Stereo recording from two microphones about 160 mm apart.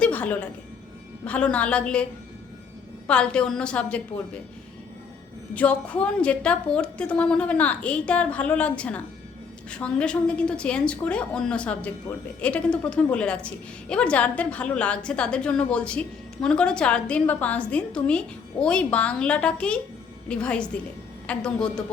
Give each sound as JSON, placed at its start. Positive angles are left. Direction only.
{"t": 0.0, "sound": "a sound", "side_deg": 10}
{"t": 1.2, "sound": "a woman's voice", "side_deg": 10}
{"t": 3.1, "sound": "a woman's voice", "side_deg": 5}
{"t": 5.5, "sound": "a woman's voice", "side_deg": 10}